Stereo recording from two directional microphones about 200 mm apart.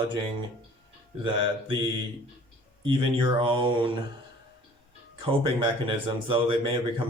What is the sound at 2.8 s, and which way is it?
Speech, 25° right (ahead or behind).